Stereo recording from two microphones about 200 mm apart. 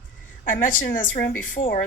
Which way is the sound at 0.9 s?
45° left (ahead or behind).